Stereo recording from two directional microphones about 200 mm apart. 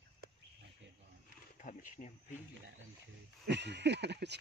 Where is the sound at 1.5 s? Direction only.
40° left (ahead or behind).